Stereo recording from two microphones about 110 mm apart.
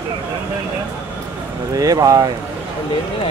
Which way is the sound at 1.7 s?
30° right (ahead or behind).